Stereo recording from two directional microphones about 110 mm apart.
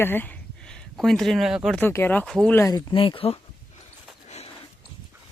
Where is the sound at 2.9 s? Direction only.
55° left (ahead or behind).